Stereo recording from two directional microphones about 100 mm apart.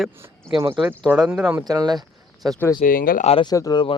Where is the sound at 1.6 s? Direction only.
40° right (ahead or behind).